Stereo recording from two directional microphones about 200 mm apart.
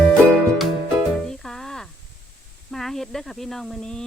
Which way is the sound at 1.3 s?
Centre (ahead or behind).